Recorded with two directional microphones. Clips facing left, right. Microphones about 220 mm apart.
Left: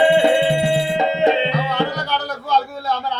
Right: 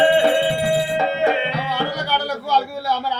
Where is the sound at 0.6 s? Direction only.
20° left (ahead or behind).